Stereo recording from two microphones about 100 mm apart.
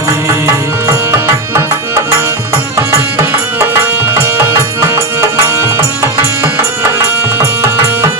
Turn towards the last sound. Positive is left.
turn(degrees=-25)  # may be behind; listen again after turning